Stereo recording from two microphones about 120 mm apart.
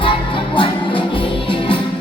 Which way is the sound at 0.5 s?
45° left (ahead or behind).